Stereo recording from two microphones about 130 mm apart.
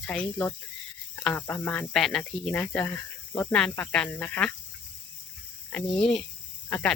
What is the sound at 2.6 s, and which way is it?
Insect, 15° left (ahead or behind).